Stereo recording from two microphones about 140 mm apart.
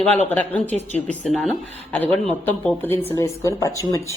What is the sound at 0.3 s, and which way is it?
A woman's voice, 10° left (ahead or behind).